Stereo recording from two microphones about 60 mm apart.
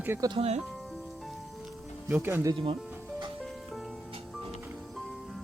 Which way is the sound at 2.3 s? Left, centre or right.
Right.